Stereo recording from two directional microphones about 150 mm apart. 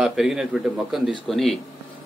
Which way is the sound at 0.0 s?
5° right (ahead or behind).